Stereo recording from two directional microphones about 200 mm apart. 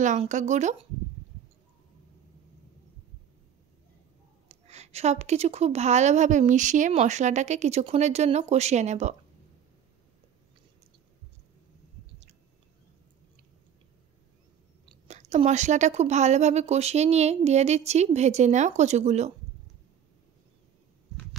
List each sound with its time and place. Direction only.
0.0 s a woman's voice: 40° right (ahead or behind)
4.5 s a woman's voice: 35° right (ahead or behind)
15.0 s a woman's voice: 35° right (ahead or behind)